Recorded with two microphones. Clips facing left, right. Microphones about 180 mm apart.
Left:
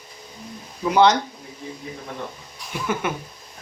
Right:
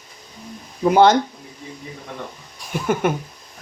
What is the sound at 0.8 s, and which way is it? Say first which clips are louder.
Speech: right 3 dB; 50° right (ahead or behind).